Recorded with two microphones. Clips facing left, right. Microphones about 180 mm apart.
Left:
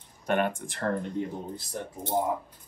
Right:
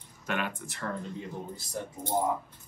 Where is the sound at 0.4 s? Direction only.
55° left (ahead or behind).